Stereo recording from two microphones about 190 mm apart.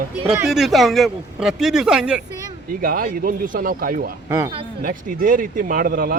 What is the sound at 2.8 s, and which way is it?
Speech, 50° right (ahead or behind).